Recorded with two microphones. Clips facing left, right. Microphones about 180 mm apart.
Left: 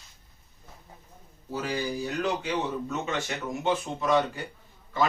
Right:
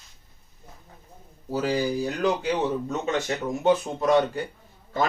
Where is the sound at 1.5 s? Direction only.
35° right (ahead or behind).